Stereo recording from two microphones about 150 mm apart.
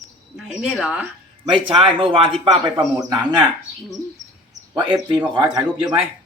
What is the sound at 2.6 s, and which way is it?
Speech, 25° right (ahead or behind).